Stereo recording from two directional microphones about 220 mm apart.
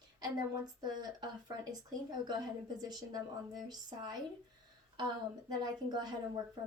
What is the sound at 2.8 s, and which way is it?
Speech, 20° right (ahead or behind).